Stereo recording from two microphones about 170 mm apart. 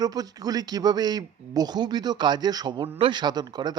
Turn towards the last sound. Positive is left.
turn(degrees=-25)  # may be behind; listen again after turning